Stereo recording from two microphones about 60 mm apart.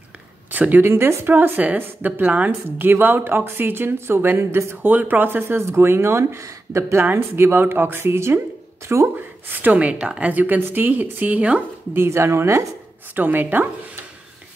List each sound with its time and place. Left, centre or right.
0.5 s speech: right
0.8 s speech: right
4.8 s speech: right
5.6 s speech: right
7.1 s speech: right
9.1 s speech: right
9.8 s speech: centre
10.3 s speech: right
11.9 s speech: right
13.1 s speech: right